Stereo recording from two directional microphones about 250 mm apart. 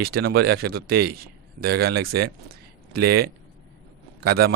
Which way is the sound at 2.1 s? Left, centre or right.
Right.